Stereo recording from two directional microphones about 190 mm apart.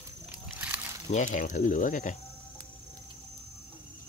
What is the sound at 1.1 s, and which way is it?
Speech, 40° left (ahead or behind).